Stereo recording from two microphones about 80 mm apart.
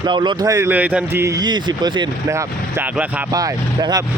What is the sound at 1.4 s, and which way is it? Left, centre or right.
Speech, right.